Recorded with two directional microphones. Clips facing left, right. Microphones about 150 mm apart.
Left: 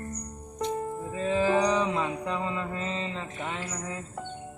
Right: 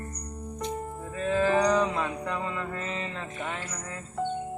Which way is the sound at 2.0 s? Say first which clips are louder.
Left 1 dB; 15° left (ahead or behind).